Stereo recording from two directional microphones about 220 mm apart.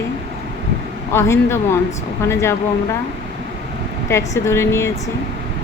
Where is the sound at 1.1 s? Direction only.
10° left (ahead or behind).